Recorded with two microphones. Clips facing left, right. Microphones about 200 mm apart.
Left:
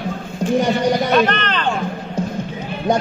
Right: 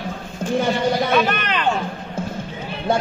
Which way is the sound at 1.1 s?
10° right (ahead or behind).